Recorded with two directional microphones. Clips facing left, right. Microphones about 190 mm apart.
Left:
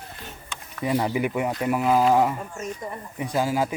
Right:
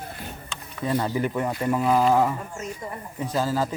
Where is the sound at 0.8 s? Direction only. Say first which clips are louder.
Left 1 dB; 15° left (ahead or behind).